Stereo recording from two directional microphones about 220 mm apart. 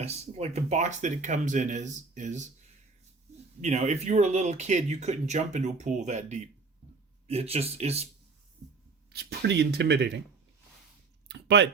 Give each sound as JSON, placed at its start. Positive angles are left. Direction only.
{"t": 0.0, "sound": "speech", "side_deg": -30}
{"t": 3.6, "sound": "speech", "side_deg": -30}
{"t": 9.1, "sound": "speech", "side_deg": -50}
{"t": 11.3, "sound": "a sound", "side_deg": -50}